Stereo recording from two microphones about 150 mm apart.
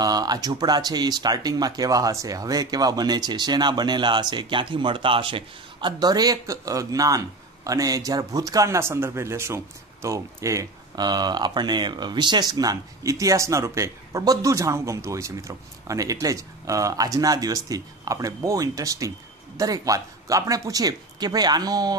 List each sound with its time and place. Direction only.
0.0 s speech: 25° right (ahead or behind)